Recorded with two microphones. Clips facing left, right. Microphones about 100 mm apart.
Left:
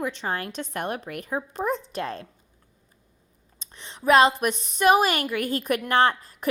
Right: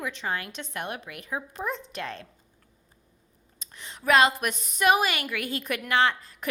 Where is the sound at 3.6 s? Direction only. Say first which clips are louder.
Left 4 dB; 25° left (ahead or behind).